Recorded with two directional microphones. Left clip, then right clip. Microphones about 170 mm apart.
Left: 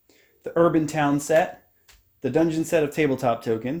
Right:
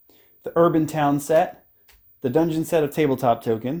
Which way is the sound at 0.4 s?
30° right (ahead or behind).